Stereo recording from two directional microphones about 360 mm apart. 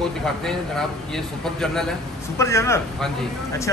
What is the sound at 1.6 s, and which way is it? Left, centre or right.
Speech, centre.